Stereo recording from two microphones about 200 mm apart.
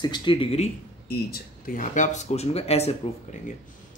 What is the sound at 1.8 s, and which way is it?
Speech, 35° left (ahead or behind).